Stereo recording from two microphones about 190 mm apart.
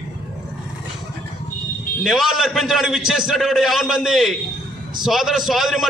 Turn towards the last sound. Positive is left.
turn(degrees=0)  # may be behind; listen again after turning